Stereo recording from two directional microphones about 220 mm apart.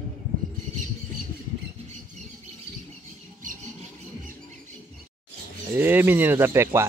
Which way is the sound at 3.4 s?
35° right (ahead or behind).